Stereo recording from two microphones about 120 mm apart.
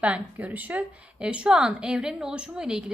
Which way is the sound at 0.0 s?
10° right (ahead or behind).